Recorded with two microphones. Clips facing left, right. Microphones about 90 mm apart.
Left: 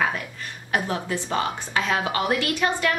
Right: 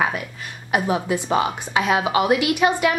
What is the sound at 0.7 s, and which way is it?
A woman's voice, 15° right (ahead or behind).